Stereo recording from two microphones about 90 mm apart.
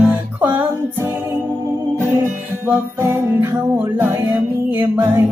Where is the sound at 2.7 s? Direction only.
25° right (ahead or behind).